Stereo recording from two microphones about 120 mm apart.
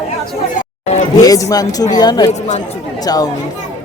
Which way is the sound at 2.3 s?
70° left (ahead or behind).